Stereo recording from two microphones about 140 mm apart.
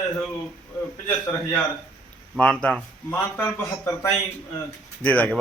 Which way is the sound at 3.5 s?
20° left (ahead or behind).